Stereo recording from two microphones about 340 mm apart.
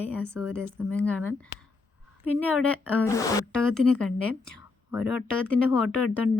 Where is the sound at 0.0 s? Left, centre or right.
Centre.